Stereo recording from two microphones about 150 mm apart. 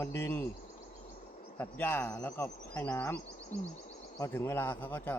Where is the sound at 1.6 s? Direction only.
15° left (ahead or behind).